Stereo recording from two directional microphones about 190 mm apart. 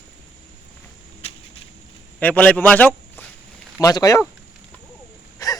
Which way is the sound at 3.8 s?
20° left (ahead or behind).